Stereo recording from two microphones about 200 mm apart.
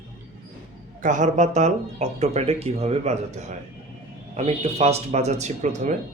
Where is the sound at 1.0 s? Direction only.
40° right (ahead or behind).